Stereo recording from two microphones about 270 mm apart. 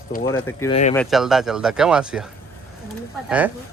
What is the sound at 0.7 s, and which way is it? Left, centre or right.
Speech, left.